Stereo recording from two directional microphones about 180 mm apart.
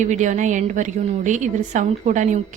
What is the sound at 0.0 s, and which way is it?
A woman's voice, 40° right (ahead or behind).